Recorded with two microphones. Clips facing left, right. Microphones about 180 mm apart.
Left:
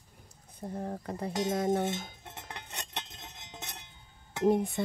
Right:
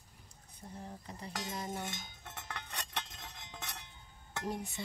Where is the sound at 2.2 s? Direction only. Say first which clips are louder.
Left 1 dB; 25° left (ahead or behind).